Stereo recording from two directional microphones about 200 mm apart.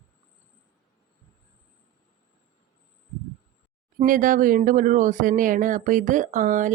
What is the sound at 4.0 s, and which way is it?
Speech, 40° right (ahead or behind).